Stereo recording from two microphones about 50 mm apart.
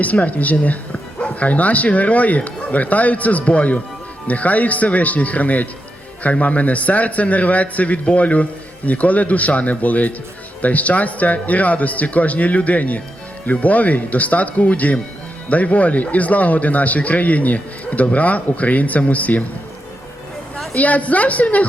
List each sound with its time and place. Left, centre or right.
0.0 s a man's voice: left
20.7 s a man's voice: left